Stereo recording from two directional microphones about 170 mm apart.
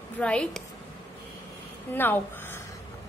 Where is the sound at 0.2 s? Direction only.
5° left (ahead or behind).